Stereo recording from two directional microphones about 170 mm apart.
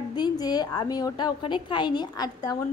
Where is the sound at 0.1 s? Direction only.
25° left (ahead or behind).